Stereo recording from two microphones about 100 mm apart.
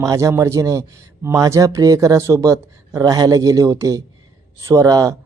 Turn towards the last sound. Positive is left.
turn(degrees=-35)  # may be behind; listen again after turning